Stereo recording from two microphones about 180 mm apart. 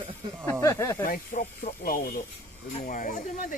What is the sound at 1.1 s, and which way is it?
Speech, 50° left (ahead or behind).